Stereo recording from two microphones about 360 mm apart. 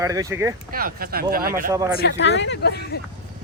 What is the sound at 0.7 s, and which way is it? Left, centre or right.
Speech, right.